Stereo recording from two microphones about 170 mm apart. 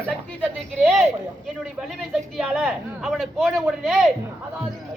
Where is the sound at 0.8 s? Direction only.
Centre (ahead or behind).